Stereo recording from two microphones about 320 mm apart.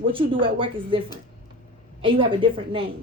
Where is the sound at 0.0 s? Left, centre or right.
Centre.